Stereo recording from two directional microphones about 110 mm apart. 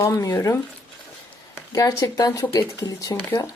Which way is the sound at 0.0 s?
30° left (ahead or behind).